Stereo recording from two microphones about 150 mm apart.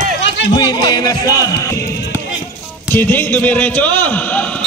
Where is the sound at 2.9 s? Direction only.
15° left (ahead or behind).